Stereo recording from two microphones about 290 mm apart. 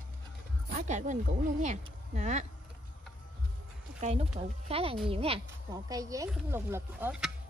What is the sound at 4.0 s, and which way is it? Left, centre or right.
A woman's voice, right.